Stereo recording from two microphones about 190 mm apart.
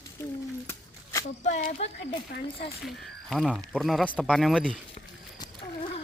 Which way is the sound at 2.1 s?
30° left (ahead or behind).